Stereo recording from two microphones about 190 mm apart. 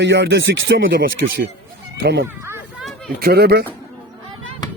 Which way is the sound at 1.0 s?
55° right (ahead or behind).